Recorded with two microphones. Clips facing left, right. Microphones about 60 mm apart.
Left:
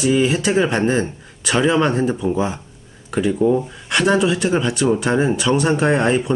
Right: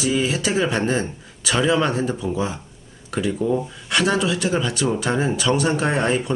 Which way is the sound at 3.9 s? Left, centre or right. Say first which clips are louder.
Left 4 dB; centre.